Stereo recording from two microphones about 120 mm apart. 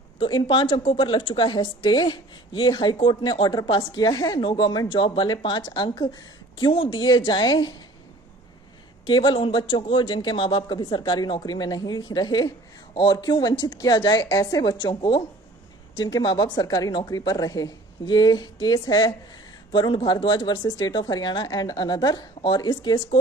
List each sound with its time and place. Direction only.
0.2 s a woman's voice: 40° left (ahead or behind)
9.0 s a man's voice: 40° left (ahead or behind)